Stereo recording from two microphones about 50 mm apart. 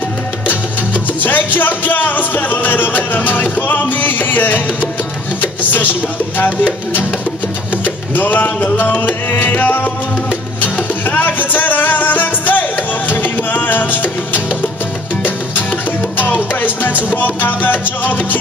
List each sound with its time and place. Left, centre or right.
1.2 s music: left
16.5 s music: left